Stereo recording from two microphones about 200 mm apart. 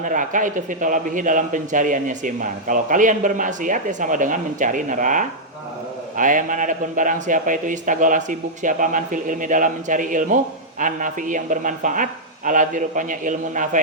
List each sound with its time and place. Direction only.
0.0 s a man's voice: 40° right (ahead or behind)